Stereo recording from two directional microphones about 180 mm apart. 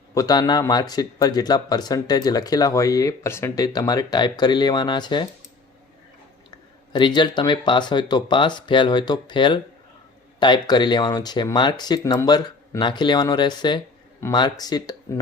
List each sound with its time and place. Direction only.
0.1 s speech: 20° left (ahead or behind)
6.9 s speech: 25° left (ahead or behind)